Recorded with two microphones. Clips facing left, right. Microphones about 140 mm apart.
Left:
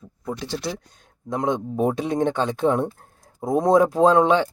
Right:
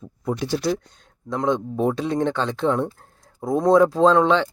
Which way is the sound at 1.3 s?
15° left (ahead or behind).